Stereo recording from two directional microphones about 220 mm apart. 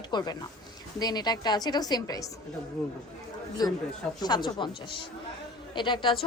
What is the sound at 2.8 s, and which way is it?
Speech, centre (ahead or behind).